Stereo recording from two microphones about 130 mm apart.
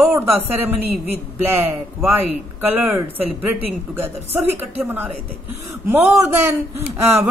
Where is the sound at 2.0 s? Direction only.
15° right (ahead or behind).